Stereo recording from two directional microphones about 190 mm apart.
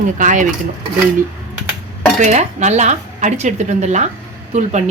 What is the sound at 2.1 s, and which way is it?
Speech, 40° right (ahead or behind).